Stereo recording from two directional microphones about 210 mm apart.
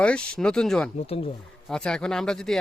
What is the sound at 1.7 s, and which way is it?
Speech, 5° left (ahead or behind).